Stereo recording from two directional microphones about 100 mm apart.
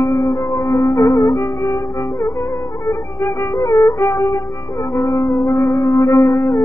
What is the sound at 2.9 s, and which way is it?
Music, 30° left (ahead or behind).